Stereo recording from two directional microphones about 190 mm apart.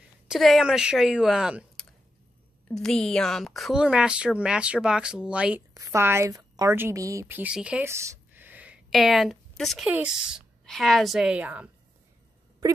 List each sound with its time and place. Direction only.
0.3 s a woman's voice: centre (ahead or behind)